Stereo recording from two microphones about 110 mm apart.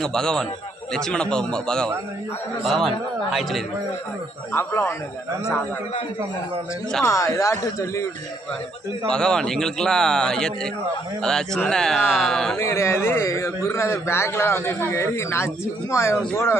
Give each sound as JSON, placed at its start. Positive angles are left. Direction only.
{"t": 0.0, "sound": "a man's voice", "side_deg": 5}
{"t": 4.5, "sound": "a man's voice", "side_deg": 25}
{"t": 7.0, "sound": "a man's voice", "side_deg": 30}
{"t": 9.0, "sound": "a man's voice", "side_deg": 5}
{"t": 12.5, "sound": "a man's voice", "side_deg": 25}